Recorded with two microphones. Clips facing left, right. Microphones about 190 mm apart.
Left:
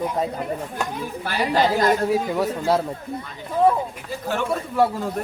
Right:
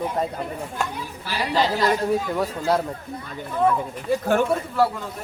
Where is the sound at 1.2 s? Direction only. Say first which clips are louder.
Left 2 dB; 50° left (ahead or behind).